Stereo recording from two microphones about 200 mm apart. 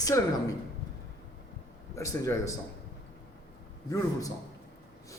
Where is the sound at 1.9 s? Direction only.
15° left (ahead or behind).